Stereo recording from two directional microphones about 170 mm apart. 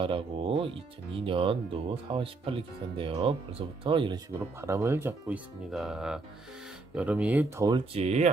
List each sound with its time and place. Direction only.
0.0 s speech: 30° right (ahead or behind)
4.6 s speech: 15° right (ahead or behind)
5.7 s speech: 5° right (ahead or behind)
7.7 s speech: 35° right (ahead or behind)